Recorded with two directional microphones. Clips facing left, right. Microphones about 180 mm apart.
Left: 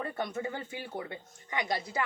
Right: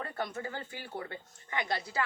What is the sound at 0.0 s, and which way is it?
Speech, 20° left (ahead or behind).